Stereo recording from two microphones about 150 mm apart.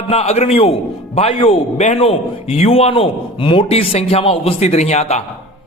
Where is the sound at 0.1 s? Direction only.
45° left (ahead or behind).